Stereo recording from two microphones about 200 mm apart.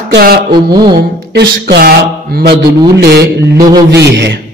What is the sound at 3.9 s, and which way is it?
Speech, 60° right (ahead or behind).